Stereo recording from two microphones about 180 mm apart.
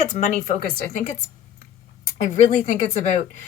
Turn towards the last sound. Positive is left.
turn(degrees=45)  # may be behind; listen again after turning